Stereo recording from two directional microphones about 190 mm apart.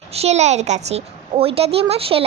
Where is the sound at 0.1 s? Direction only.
35° right (ahead or behind).